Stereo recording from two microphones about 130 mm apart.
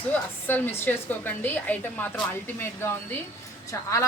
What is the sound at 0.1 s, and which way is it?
Speech, 15° left (ahead or behind).